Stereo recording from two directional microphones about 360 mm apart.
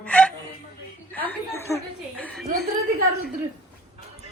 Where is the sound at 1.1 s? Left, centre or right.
Centre.